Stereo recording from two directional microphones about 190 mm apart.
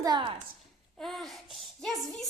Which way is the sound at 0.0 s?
20° right (ahead or behind).